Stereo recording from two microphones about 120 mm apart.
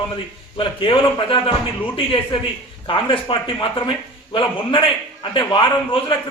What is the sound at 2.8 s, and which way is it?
A man's voice, 45° left (ahead or behind).